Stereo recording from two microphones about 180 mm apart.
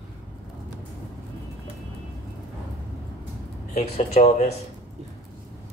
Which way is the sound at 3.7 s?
40° left (ahead or behind).